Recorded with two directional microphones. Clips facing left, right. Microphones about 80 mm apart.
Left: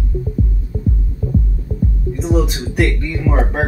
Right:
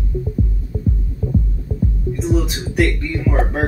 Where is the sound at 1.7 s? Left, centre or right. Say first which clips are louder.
Left 1 dB; left.